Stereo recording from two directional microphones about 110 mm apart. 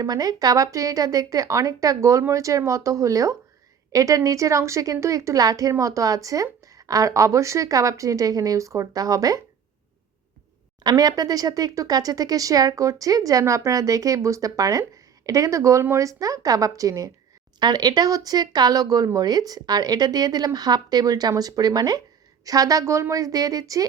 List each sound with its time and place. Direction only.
0.0 s speech: 35° right (ahead or behind)
10.8 s speech: 35° right (ahead or behind)